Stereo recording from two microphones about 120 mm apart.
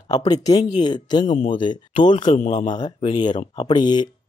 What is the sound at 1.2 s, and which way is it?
Speech, 90° left.